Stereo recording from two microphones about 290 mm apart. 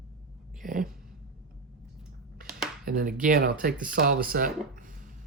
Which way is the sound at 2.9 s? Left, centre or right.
Right.